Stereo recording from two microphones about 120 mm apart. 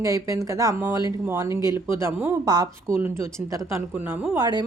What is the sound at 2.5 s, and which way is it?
Speech, 35° right (ahead or behind).